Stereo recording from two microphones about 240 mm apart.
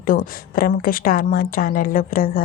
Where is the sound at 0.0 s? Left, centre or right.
Left.